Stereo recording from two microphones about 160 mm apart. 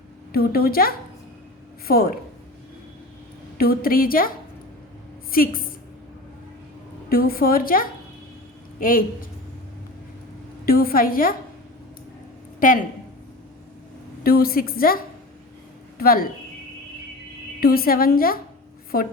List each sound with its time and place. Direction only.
0.3 s a woman's voice: 70° left (ahead or behind)
3.6 s a woman's voice: 70° left (ahead or behind)
7.1 s a woman's voice: 70° left (ahead or behind)
10.7 s a woman's voice: 65° left (ahead or behind)
12.5 s speech: 60° left (ahead or behind)
14.3 s a woman's voice: 70° left (ahead or behind)
17.6 s a woman's voice: 70° left (ahead or behind)